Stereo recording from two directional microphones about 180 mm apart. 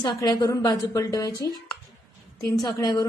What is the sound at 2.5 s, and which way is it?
Speech, 20° left (ahead or behind).